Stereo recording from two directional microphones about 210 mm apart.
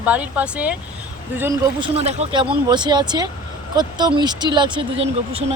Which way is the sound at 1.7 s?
25° right (ahead or behind).